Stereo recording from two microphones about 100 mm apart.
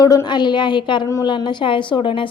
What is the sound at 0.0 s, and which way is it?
A woman's voice, 40° left (ahead or behind).